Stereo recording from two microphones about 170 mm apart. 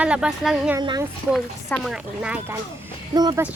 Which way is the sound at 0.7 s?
25° right (ahead or behind).